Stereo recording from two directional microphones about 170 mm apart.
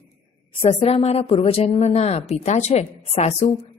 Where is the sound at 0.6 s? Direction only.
40° left (ahead or behind).